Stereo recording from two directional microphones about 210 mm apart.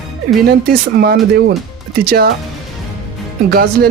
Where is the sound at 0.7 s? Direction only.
50° right (ahead or behind).